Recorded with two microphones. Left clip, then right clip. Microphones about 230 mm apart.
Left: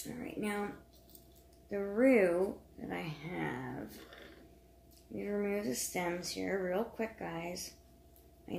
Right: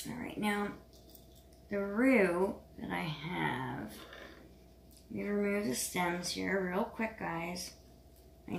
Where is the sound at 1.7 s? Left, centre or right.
Right.